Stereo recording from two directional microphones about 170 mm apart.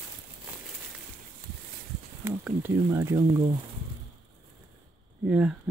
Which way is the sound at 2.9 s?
20° right (ahead or behind).